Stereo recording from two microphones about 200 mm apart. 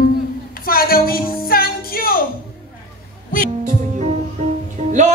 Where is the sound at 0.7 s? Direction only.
45° left (ahead or behind).